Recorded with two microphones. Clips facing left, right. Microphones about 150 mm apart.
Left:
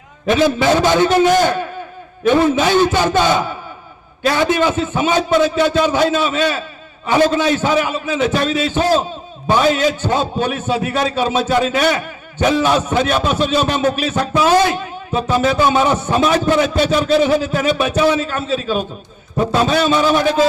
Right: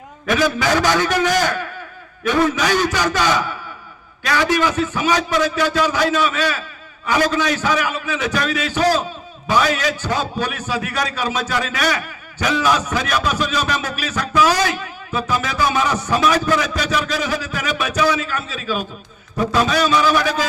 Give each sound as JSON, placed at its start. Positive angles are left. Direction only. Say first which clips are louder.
{"t": 0.3, "sound": "a man's voice", "louder": "left 4 dB", "side_deg": 25}